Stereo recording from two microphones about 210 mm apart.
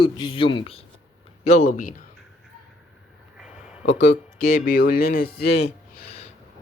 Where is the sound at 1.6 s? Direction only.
40° left (ahead or behind).